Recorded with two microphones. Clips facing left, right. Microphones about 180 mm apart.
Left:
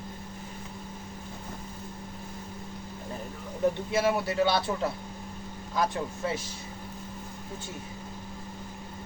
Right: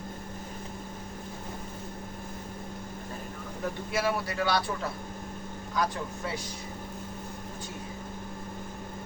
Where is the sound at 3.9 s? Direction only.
25° left (ahead or behind).